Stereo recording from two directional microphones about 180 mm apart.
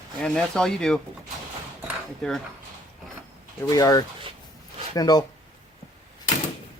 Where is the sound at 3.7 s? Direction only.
20° left (ahead or behind).